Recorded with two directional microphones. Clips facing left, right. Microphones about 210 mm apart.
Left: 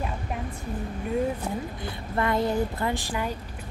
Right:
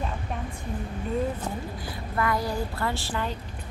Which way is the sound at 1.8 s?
25° left (ahead or behind).